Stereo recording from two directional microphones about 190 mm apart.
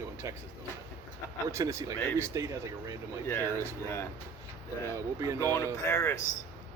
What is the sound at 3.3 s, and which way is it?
Speech, 10° left (ahead or behind).